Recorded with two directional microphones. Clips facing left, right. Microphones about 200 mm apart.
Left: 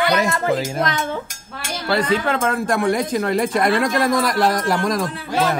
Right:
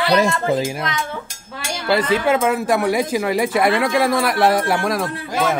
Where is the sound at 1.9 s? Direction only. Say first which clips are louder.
Right 2 dB; 10° right (ahead or behind).